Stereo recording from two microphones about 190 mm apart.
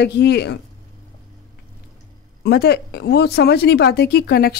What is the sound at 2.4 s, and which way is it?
A woman's voice, 55° left (ahead or behind).